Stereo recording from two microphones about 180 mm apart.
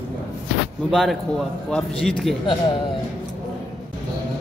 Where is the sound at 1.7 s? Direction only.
5° left (ahead or behind).